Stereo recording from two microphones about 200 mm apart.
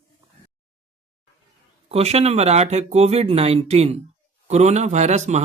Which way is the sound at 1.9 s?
30° right (ahead or behind).